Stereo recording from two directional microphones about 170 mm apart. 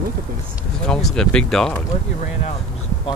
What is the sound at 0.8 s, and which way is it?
Speech, 5° left (ahead or behind).